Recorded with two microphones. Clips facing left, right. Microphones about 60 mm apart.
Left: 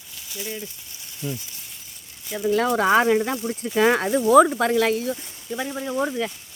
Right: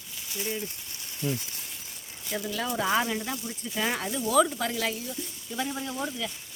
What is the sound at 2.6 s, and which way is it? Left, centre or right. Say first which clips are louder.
Speech: left 8 dB; left.